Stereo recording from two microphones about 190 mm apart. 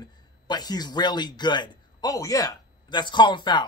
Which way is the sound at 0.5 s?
20° left (ahead or behind).